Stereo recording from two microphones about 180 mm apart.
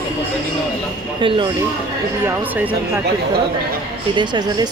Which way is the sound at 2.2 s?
10° right (ahead or behind).